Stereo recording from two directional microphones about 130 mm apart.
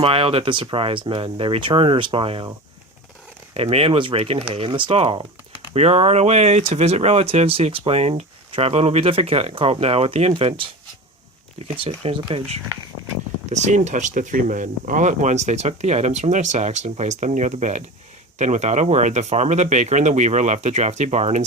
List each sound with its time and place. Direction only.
0.0 s speech: 45° right (ahead or behind)
3.5 s speech: 50° right (ahead or behind)
11.7 s speech: 40° right (ahead or behind)
13.5 s speech: 65° right (ahead or behind)